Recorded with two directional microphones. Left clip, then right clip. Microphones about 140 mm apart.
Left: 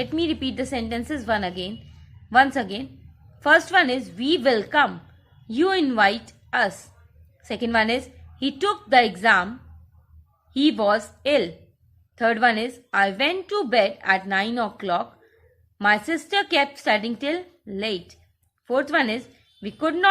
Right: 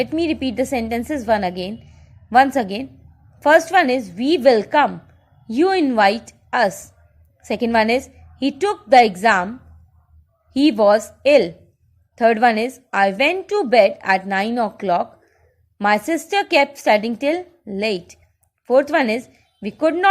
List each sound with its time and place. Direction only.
0.0 s a woman's voice: 25° right (ahead or behind)
10.6 s a woman's voice: 30° right (ahead or behind)